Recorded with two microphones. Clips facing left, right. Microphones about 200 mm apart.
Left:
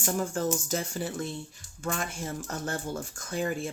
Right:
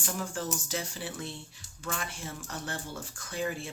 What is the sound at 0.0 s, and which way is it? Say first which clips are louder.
Speech: left 6 dB; 45° left (ahead or behind).